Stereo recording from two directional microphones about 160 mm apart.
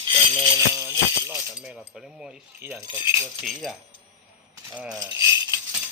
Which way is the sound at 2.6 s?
15° right (ahead or behind).